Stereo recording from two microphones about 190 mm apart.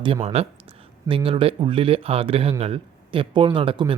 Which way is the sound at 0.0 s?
25° right (ahead or behind).